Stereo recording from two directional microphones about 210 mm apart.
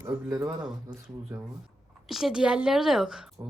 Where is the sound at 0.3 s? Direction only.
15° right (ahead or behind).